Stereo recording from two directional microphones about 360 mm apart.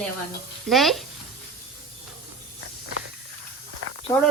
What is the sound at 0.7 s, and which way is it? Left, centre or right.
Speech, centre.